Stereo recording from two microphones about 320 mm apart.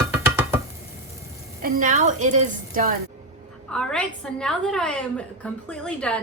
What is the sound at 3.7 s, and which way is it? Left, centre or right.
A woman's voice, centre.